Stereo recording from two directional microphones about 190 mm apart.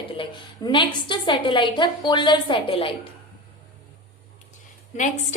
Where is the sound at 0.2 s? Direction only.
25° left (ahead or behind).